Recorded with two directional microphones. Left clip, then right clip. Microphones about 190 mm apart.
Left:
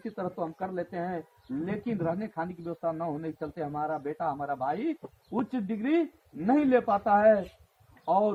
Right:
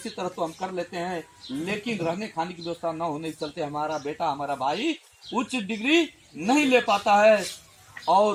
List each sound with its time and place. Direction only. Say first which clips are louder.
0.2 s speech: right 4 dB; 20° right (ahead or behind)
1.6 s speech: right 4 dB; 5° right (ahead or behind)